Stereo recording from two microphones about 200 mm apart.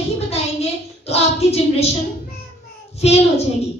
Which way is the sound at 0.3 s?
30° left (ahead or behind).